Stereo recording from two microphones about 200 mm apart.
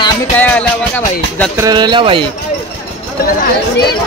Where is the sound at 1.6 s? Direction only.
20° right (ahead or behind).